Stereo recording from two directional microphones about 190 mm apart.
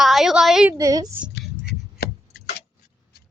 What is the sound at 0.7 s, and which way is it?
Speech, 20° right (ahead or behind).